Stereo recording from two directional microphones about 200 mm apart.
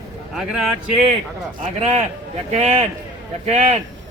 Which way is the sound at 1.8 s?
30° right (ahead or behind).